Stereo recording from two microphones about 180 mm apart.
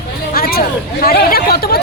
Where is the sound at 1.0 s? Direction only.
60° left (ahead or behind).